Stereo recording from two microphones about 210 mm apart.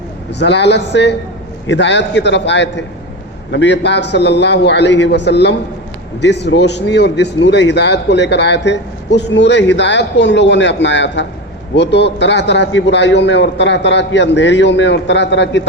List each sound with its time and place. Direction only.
0.3 s a man's voice: 55° left (ahead or behind)